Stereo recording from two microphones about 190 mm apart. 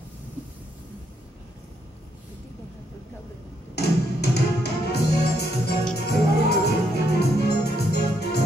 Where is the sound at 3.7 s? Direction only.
60° left (ahead or behind).